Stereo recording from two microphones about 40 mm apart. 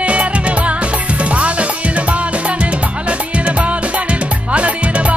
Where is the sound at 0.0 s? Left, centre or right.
Right.